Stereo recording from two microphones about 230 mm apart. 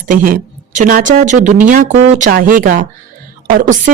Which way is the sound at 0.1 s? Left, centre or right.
Right.